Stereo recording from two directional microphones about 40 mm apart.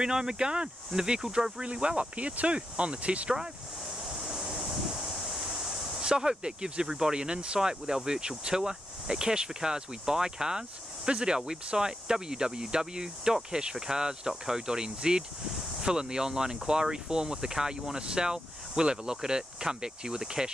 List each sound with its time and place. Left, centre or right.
0.0 s speech: centre
1.2 s speech: centre
1.6 s speech: right
4.0 s waves: centre
5.8 s speech: centre